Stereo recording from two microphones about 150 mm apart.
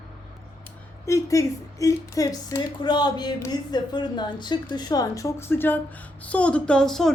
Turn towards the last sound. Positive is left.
turn(degrees=5)  # may be behind; listen again after turning